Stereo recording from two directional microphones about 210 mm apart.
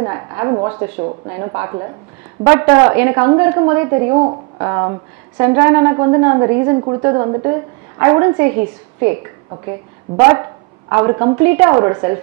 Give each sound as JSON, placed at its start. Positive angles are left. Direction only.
{"t": 0.0, "sound": "a woman's voice", "side_deg": -20}
{"t": 10.1, "sound": "a woman's voice", "side_deg": -20}